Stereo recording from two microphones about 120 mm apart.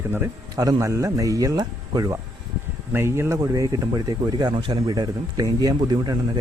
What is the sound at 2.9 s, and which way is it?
Speech, 20° right (ahead or behind).